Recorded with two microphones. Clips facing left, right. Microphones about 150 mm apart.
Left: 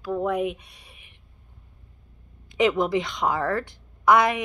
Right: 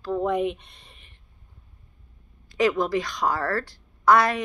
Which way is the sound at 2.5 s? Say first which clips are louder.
Left 1 dB; 20° left (ahead or behind).